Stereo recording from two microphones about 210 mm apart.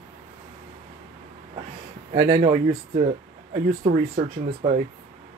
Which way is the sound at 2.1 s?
25° right (ahead or behind).